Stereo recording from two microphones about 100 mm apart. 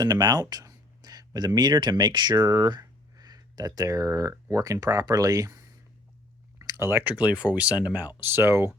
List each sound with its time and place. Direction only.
0.0 s speech: 40° right (ahead or behind); by 8.7 s 25° right (ahead or behind)